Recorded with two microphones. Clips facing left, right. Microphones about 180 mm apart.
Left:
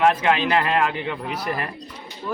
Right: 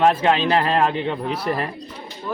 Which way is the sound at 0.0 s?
30° right (ahead or behind).